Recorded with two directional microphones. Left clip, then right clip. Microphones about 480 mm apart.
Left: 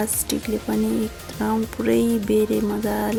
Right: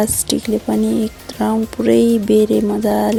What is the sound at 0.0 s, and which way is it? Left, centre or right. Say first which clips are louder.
Music: right 7 dB; left.